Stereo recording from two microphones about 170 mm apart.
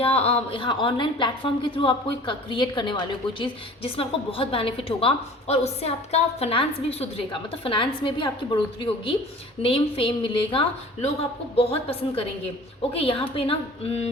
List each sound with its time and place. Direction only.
0.0 s a woman's voice: 35° left (ahead or behind)